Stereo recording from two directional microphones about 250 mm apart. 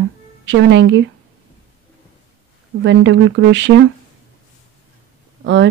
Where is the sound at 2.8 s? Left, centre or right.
Right.